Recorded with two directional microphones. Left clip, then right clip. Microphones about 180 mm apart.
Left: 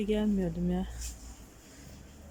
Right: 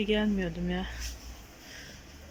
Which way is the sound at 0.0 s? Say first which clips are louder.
Right 2 dB; 15° left (ahead or behind).